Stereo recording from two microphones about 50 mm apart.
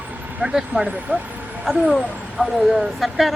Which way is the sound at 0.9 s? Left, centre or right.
Right.